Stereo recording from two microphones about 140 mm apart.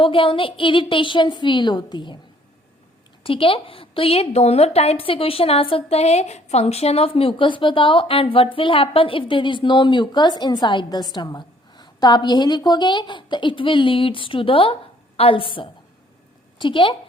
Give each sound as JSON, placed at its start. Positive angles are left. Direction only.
{"t": 0.0, "sound": "a woman's voice", "side_deg": 40}
{"t": 3.2, "sound": "a woman's voice", "side_deg": 40}